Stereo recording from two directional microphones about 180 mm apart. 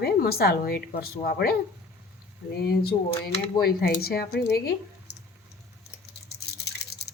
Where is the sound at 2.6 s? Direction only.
60° left (ahead or behind).